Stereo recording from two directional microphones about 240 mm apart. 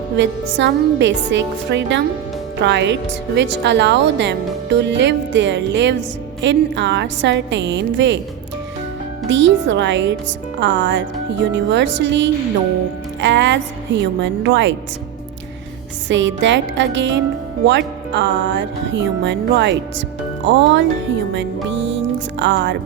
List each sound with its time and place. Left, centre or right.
0.2 s a woman's voice: right
9.3 s a woman's voice: right
16.0 s a woman's voice: right